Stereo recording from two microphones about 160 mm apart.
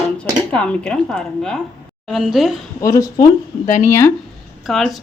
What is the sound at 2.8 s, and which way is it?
Speech, 20° left (ahead or behind).